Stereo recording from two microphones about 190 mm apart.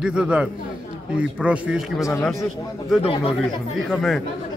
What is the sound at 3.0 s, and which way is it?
Speech, 30° left (ahead or behind).